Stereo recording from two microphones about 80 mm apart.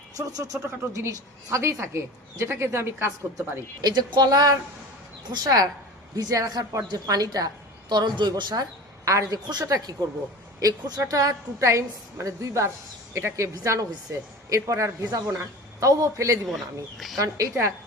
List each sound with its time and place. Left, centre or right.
0.3 s speech: right
3.8 s a woman's voice: right
9.0 s a man's voice: right
15.8 s a man's voice: right